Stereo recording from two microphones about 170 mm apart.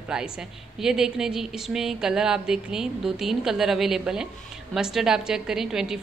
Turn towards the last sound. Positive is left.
turn(degrees=-5)  # may be behind; listen again after turning